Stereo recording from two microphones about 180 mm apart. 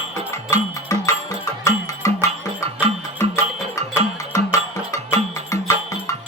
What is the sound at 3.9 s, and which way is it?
Music, 20° left (ahead or behind).